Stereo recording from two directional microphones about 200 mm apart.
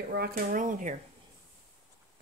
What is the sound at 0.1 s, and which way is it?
Speech, 50° right (ahead or behind).